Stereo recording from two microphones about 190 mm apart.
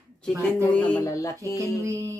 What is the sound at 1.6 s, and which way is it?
Speech, 15° right (ahead or behind).